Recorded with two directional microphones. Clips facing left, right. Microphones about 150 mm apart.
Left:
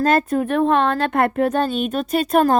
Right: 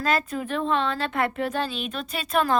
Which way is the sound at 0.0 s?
50° left (ahead or behind).